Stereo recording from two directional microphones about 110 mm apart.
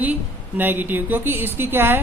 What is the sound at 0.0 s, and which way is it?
A woman's voice, 15° right (ahead or behind).